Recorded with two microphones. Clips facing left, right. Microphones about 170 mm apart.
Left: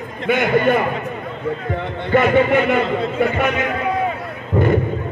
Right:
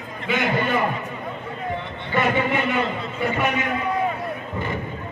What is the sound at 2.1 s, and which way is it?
A man's voice, 55° left (ahead or behind).